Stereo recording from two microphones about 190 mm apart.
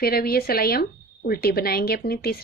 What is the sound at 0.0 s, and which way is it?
Speech, 55° left (ahead or behind).